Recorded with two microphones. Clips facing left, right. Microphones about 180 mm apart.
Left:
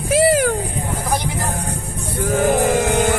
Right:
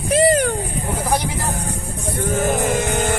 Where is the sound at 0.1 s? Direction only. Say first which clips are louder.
Left 1 dB; 5° left (ahead or behind).